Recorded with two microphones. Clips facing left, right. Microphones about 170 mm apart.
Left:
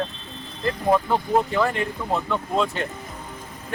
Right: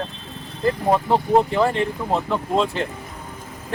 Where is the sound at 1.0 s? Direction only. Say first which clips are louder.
Right 4 dB; 30° right (ahead or behind).